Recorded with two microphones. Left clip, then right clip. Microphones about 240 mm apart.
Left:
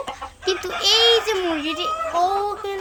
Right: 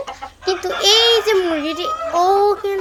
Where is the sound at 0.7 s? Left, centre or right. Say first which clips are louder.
Right 3 dB; centre.